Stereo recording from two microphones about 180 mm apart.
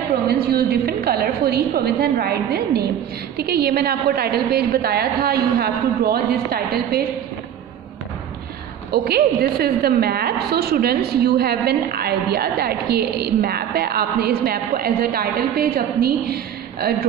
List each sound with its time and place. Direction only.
0.3 s a woman's voice: 60° right (ahead or behind)
8.9 s a woman's voice: 60° right (ahead or behind)